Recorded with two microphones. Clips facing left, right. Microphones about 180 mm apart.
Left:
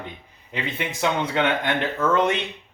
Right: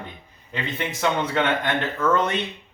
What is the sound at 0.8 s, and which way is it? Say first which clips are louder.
Speech: even; 15° left (ahead or behind).